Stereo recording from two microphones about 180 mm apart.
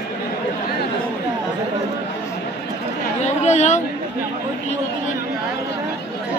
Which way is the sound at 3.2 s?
40° left (ahead or behind).